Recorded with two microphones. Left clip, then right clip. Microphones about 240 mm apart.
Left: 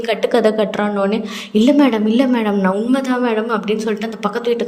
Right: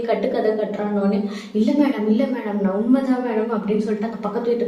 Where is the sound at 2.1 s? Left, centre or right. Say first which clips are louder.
Left 7 dB; left.